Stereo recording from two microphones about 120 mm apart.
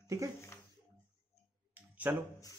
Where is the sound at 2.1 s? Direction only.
15° right (ahead or behind).